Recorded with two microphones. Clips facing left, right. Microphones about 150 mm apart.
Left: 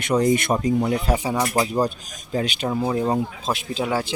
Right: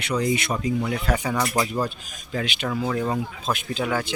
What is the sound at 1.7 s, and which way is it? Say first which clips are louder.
Speech: left 4 dB; 40° left (ahead or behind).